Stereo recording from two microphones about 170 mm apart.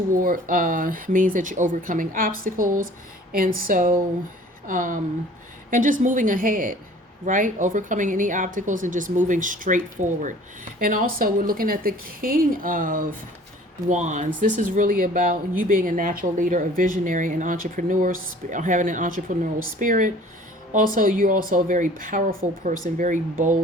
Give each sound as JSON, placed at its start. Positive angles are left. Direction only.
{"t": 0.1, "sound": "a woman's voice", "side_deg": -55}